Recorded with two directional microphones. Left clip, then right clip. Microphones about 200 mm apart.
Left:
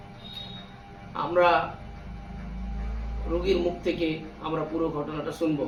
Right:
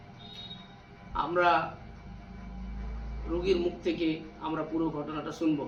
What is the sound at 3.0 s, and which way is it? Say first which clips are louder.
A man's voice: left 3 dB; centre (ahead or behind).